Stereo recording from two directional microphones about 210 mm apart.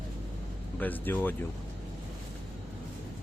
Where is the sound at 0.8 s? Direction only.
10° left (ahead or behind).